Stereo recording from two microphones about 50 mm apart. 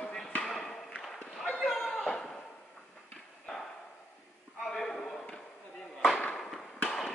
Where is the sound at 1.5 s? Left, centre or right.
Centre.